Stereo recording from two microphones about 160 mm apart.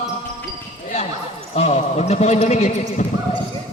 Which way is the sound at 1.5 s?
40° left (ahead or behind).